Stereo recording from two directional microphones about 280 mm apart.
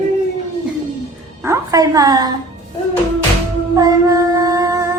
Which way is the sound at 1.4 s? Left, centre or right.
Centre.